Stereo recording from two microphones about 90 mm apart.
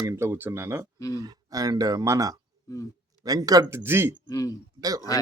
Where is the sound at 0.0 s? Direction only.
30° right (ahead or behind).